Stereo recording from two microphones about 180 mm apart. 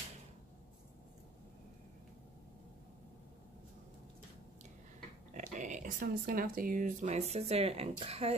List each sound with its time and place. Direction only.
5.3 s speech: 45° right (ahead or behind)